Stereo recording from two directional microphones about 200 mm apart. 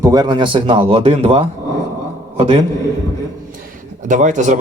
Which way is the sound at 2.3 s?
25° right (ahead or behind).